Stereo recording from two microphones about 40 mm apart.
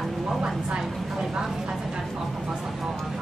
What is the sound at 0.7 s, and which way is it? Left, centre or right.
Speech, centre.